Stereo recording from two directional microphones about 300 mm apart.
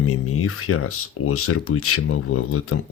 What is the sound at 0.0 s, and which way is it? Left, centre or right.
Speech, left.